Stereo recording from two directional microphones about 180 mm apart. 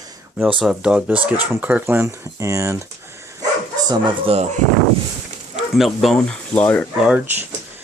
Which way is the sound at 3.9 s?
30° right (ahead or behind).